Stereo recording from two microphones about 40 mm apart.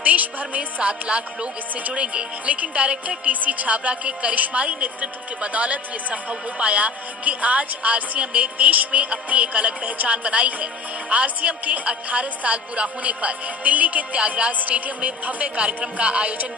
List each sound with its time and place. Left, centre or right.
0.0 s speech: right
3.3 s speech: right